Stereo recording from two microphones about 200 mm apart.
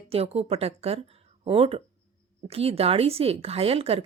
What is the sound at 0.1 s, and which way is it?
Speech, 30° right (ahead or behind).